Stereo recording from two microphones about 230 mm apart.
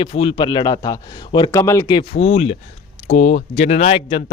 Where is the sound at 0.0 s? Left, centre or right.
Left.